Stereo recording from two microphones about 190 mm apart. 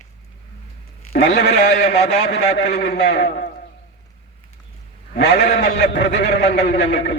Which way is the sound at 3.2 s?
40° left (ahead or behind).